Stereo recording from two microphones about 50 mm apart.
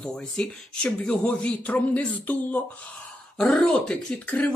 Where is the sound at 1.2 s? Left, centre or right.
Left.